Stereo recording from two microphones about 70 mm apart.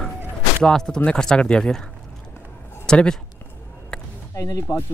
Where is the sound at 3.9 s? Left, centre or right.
Centre.